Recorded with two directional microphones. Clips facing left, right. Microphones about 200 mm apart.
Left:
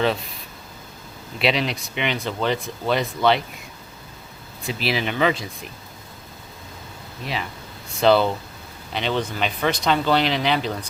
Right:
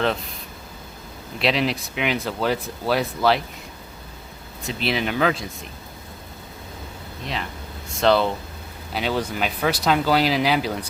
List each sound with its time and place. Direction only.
0.0 s speech: centre (ahead or behind)
1.4 s speech: centre (ahead or behind)
4.8 s speech: centre (ahead or behind)
8.0 s speech: centre (ahead or behind)